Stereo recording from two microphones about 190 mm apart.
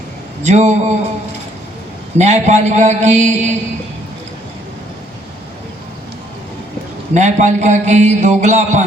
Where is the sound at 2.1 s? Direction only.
35° right (ahead or behind).